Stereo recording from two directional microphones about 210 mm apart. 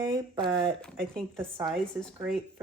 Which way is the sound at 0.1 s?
20° right (ahead or behind).